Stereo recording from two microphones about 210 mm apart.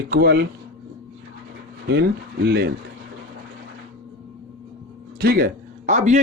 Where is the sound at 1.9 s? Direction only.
50° right (ahead or behind).